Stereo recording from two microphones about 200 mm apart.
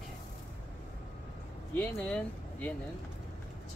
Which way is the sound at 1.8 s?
5° left (ahead or behind).